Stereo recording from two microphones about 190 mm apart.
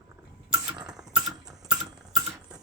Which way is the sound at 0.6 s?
25° right (ahead or behind).